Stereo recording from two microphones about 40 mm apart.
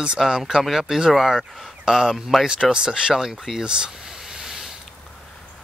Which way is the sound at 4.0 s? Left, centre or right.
Centre.